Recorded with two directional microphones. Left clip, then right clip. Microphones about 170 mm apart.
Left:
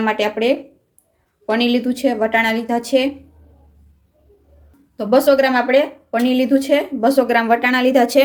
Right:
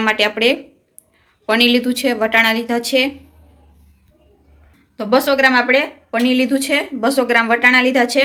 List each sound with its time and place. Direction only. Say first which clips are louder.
0.0 s a woman's voice: right 3 dB; 15° left (ahead or behind)
4.9 s a woman's voice: left 1 dB; 20° left (ahead or behind)